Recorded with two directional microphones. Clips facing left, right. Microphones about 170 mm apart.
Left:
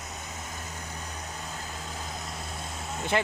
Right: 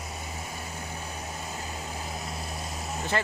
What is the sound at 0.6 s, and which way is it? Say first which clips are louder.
Vehicle: right 2 dB; 10° right (ahead or behind).